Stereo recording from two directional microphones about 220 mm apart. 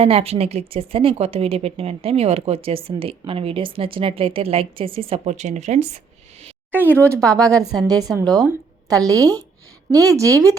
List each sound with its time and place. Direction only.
0.0 s speech: 25° right (ahead or behind)
6.8 s speech: 5° left (ahead or behind)
7.1 s speech: 15° right (ahead or behind)